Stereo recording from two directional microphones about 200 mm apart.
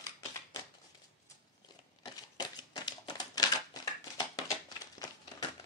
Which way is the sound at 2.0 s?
20° left (ahead or behind).